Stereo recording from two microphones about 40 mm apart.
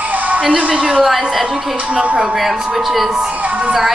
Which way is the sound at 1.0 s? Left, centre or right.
Centre.